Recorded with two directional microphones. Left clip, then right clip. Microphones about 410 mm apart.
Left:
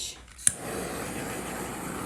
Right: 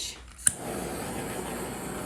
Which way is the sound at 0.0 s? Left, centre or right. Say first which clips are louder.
Right 1 dB; centre.